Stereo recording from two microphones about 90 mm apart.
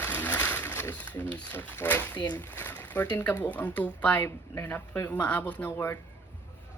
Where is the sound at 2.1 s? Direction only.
50° left (ahead or behind).